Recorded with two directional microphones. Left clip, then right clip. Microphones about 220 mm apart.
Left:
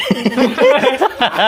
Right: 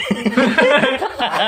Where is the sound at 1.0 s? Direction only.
55° left (ahead or behind).